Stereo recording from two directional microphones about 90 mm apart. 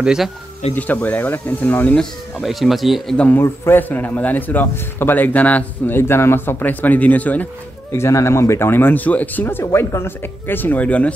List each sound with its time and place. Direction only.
0.0 s speech: 10° right (ahead or behind)
0.7 s a man's voice: 20° left (ahead or behind)
2.0 s speech: centre (ahead or behind)
3.3 s a man's voice: 25° left (ahead or behind)
7.9 s a man's voice: 30° left (ahead or behind); by 11.1 s 15° left (ahead or behind)